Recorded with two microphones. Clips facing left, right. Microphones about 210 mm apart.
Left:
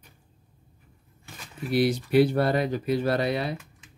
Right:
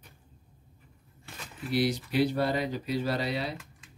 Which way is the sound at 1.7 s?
55° left (ahead or behind).